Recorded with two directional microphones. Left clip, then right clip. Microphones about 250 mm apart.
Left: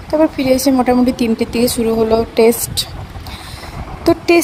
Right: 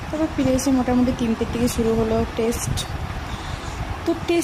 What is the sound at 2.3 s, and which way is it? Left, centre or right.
Speech, left.